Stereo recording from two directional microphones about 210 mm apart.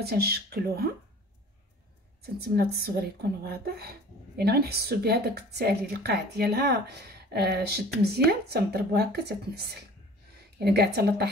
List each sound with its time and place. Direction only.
0.0 s a woman's voice: 50° right (ahead or behind)
2.2 s a woman's voice: 50° right (ahead or behind)